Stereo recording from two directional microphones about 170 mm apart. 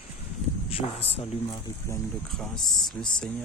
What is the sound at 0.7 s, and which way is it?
Speech, 35° left (ahead or behind).